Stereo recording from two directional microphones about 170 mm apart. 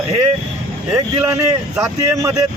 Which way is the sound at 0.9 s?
15° right (ahead or behind).